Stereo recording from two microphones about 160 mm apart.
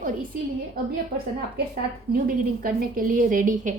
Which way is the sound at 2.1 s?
65° right (ahead or behind).